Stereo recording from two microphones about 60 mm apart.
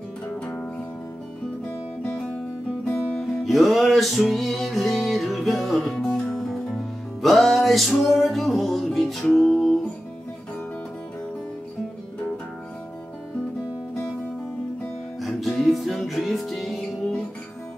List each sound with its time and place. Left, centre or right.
2.0 s music: centre
3.4 s music: centre
15.1 s music: centre